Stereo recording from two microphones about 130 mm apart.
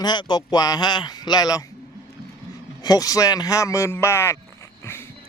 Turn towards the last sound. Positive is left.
turn(degrees=20)  # may be behind; listen again after turning